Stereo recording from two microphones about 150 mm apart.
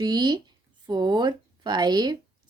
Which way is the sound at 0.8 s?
30° right (ahead or behind).